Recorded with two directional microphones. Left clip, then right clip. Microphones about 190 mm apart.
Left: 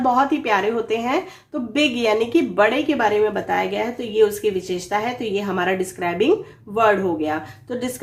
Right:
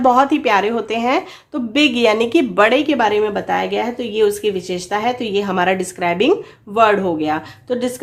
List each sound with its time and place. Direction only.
0.0 s a woman's voice: 45° right (ahead or behind)